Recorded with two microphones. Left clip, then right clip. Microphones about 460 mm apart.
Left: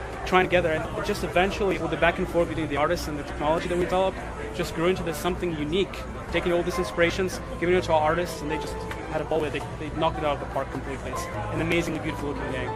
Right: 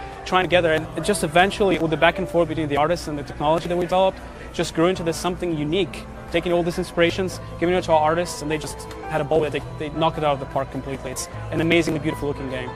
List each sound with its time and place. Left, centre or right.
0.3 s speech: right
6.3 s speech: right
11.7 s speech: right